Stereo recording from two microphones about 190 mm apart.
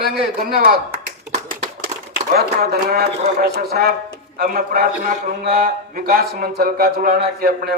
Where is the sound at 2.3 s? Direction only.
55° right (ahead or behind).